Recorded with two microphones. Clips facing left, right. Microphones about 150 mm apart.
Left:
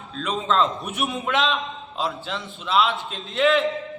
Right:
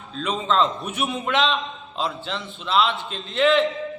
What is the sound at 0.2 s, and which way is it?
A man's voice, centre (ahead or behind).